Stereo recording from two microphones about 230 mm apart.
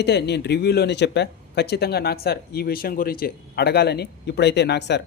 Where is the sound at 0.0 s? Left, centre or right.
Left.